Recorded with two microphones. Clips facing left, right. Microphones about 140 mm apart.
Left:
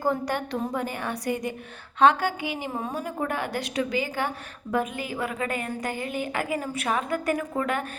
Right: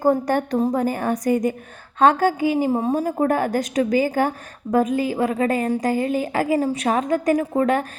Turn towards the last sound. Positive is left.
turn(degrees=-35)  # may be behind; listen again after turning